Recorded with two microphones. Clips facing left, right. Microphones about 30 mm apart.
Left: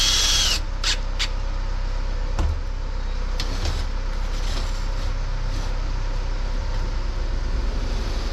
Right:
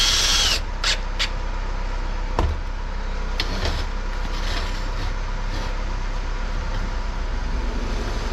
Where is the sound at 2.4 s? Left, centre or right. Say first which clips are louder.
Right 7 dB; right.